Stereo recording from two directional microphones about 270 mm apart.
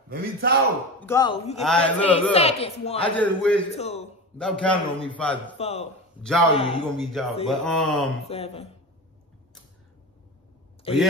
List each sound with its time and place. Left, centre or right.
0.1 s speech: right
1.0 s speech: centre
1.6 s a man's voice: centre
2.3 s a woman's voice: left
3.2 s a man's voice: centre
3.7 s a woman's voice: left
4.4 s a man's voice: centre
5.6 s a woman's voice: left
6.9 s a man's voice: centre
8.3 s a woman's voice: left
10.9 s speech: left